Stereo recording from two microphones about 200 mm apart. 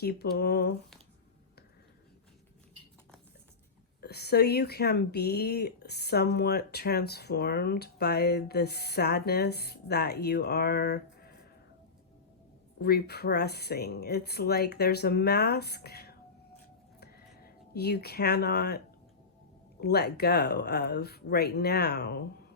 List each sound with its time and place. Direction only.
0.0 s speech: 55° left (ahead or behind)
4.0 s speech: 55° left (ahead or behind)
12.8 s speech: 50° left (ahead or behind)
17.0 s a sound: 55° left (ahead or behind)
19.8 s speech: 55° left (ahead or behind)